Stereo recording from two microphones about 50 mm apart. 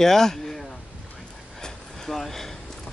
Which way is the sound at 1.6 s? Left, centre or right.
Centre.